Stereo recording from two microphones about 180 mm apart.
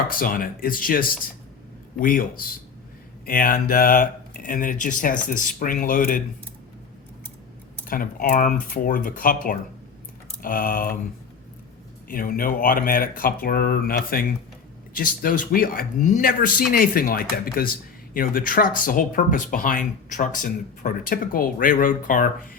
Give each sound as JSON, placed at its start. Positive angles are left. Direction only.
{"t": 0.1, "sound": "speech", "side_deg": 50}
{"t": 7.9, "sound": "speech", "side_deg": 50}
{"t": 12.0, "sound": "speech", "side_deg": 50}